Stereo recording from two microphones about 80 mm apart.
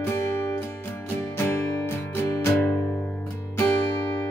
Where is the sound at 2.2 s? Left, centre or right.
Left.